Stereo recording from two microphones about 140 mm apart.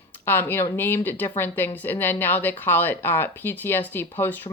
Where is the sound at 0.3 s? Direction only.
15° left (ahead or behind).